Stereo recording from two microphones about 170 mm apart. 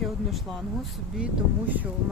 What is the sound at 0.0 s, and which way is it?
Speech, centre (ahead or behind).